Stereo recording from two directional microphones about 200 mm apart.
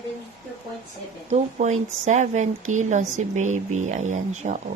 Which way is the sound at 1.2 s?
35° right (ahead or behind).